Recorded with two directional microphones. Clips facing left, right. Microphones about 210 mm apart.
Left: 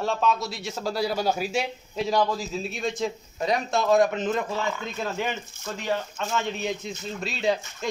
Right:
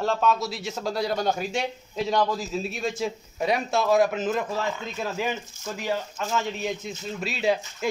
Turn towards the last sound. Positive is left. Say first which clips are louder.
# right 1 dB
turn(degrees=-5)  # may be behind; listen again after turning